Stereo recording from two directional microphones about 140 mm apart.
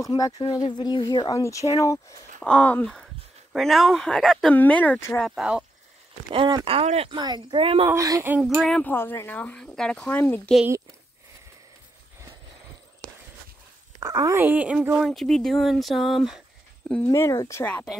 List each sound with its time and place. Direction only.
0.0 s a woman's voice: 25° left (ahead or behind)
2.4 s a woman's voice: 10° left (ahead or behind)
5.2 s speech: 5° right (ahead or behind)
6.3 s speech: 40° right (ahead or behind)
7.2 s speech: 30° right (ahead or behind)
7.9 s speech: 20° right (ahead or behind)
8.4 s speech: 5° left (ahead or behind)
8.9 s a woman's voice: 15° left (ahead or behind)
13.9 s speech: 25° right (ahead or behind)
14.4 s speech: 10° right (ahead or behind)
17.1 s speech: 20° left (ahead or behind)